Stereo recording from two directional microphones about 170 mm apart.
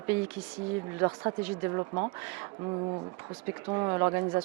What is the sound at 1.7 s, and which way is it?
Speech, 30° right (ahead or behind).